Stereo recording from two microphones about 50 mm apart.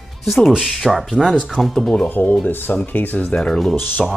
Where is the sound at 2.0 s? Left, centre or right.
Left.